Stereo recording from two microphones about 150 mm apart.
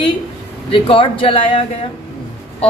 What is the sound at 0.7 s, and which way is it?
A woman's voice, 35° left (ahead or behind).